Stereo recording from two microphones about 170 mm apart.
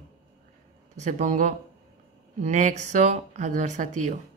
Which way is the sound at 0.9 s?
45° right (ahead or behind).